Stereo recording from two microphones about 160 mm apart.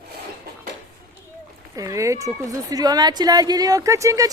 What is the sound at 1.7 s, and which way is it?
A woman's voice, 20° right (ahead or behind).